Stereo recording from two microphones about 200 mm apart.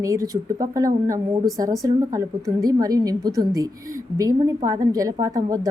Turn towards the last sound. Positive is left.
turn(degrees=-15)  # may be behind; listen again after turning